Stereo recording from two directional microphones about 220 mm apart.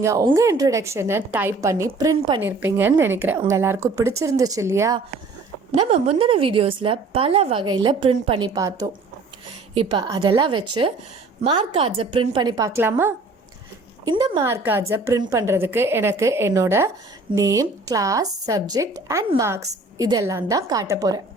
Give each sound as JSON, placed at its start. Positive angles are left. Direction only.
{"t": 0.0, "sound": "a woman's voice", "side_deg": -15}
{"t": 5.9, "sound": "a woman's voice", "side_deg": -25}